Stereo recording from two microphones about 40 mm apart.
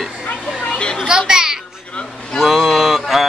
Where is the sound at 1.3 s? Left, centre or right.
Centre.